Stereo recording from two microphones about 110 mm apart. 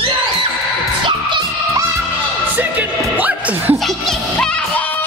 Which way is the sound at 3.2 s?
15° right (ahead or behind).